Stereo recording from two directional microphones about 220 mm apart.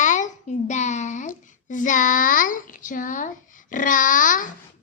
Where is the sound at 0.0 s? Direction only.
35° left (ahead or behind).